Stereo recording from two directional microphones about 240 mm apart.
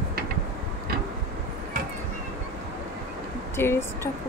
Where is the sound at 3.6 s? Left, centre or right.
Centre.